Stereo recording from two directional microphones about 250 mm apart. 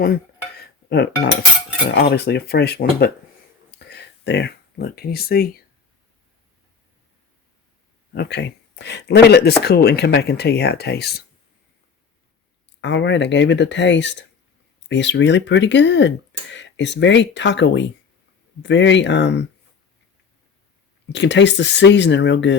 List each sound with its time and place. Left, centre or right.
0.9 s speech: left
8.1 s speech: left
12.8 s speech: left
21.1 s speech: left